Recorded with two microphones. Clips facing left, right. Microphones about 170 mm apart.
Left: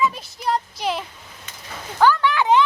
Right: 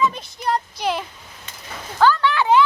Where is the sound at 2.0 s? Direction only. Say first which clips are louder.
Even; 15° left (ahead or behind).